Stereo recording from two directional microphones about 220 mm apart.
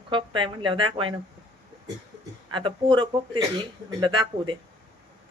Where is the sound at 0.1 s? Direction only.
20° right (ahead or behind).